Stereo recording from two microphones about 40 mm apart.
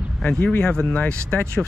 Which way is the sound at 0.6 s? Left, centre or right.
Left.